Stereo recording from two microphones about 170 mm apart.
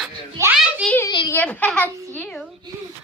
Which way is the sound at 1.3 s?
10° left (ahead or behind).